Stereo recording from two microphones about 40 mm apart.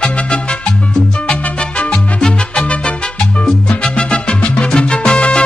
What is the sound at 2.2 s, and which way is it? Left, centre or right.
Music, centre.